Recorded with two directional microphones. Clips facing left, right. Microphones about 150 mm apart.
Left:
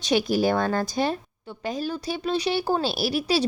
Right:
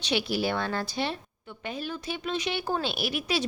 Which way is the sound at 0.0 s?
45° left (ahead or behind).